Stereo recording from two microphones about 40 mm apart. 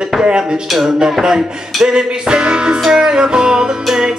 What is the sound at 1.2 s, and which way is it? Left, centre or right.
Music, centre.